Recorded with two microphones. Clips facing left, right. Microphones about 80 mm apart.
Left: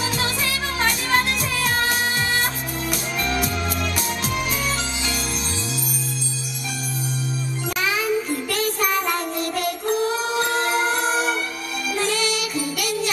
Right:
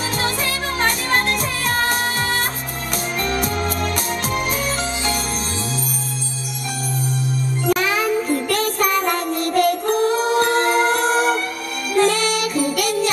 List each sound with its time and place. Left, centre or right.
0.8 s music: right
7.6 s music: right